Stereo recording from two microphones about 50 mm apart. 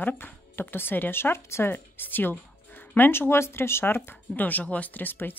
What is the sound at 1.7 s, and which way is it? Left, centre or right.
A woman's voice, left.